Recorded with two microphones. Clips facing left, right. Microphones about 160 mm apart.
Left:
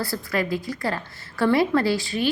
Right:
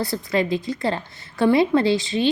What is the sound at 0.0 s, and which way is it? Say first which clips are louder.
A woman's voice: right 3 dB; 20° right (ahead or behind).